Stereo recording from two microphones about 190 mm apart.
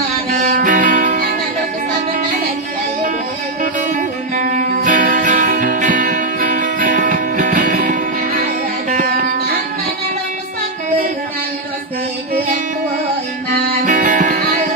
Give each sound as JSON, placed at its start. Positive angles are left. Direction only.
{"t": 0.3, "sound": "music", "side_deg": -45}
{"t": 3.9, "sound": "music", "side_deg": -45}
{"t": 13.8, "sound": "music", "side_deg": -45}